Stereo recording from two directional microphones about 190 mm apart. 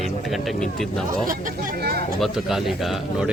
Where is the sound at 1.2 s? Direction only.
45° right (ahead or behind).